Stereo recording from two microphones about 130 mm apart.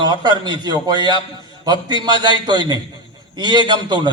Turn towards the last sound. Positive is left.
turn(degrees=-35)  # may be behind; listen again after turning